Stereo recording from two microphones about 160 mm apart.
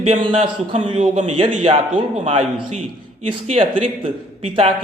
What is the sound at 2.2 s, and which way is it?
Speech, 35° right (ahead or behind).